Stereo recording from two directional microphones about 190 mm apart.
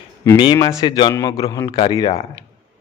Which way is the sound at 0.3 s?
20° left (ahead or behind).